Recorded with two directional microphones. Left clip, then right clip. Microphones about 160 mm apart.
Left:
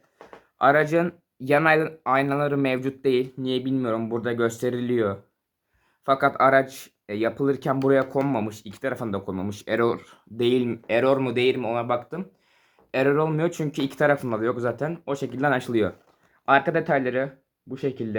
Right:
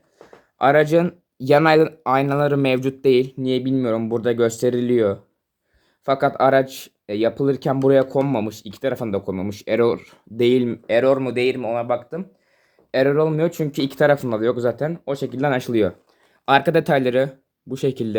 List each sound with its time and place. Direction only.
0.6 s speech: 40° right (ahead or behind)
10.7 s speech: 15° right (ahead or behind)
12.9 s speech: 20° right (ahead or behind)
16.5 s speech: 75° right (ahead or behind); by 18.2 s 90° right